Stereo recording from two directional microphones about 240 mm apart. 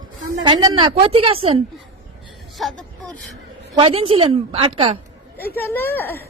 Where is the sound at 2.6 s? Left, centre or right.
Centre.